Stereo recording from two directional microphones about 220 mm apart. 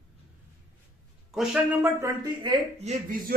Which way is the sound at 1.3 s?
5° right (ahead or behind).